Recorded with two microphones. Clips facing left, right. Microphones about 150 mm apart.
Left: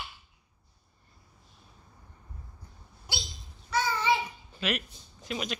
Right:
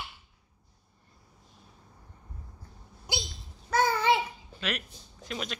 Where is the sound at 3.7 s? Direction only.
50° right (ahead or behind).